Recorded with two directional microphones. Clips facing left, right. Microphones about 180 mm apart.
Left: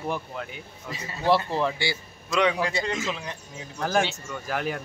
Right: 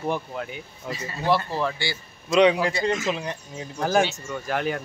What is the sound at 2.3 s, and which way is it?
Speech, 20° right (ahead or behind).